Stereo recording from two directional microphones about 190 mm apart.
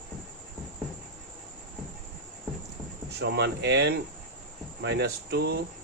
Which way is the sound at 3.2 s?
65° right (ahead or behind).